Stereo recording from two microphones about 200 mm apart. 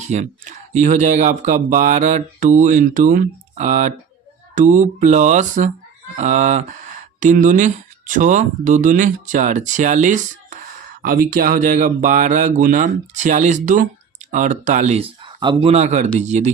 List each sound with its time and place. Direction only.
0.1 s speech: 35° right (ahead or behind)
15.2 s speech: 25° right (ahead or behind)